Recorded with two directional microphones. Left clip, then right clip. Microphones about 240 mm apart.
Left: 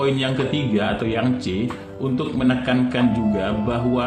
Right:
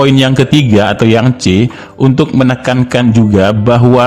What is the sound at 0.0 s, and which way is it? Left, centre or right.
A man's voice, right.